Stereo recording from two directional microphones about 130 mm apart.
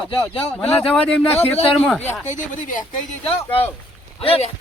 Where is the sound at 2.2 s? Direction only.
70° left (ahead or behind).